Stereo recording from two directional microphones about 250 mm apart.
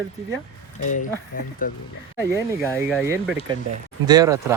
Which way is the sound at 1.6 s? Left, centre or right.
Left.